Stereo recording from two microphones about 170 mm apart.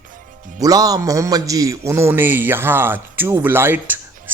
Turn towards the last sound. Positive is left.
turn(degrees=-10)  # may be behind; listen again after turning